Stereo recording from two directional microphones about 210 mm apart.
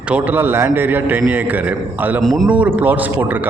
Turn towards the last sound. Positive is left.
turn(degrees=-10)  # may be behind; listen again after turning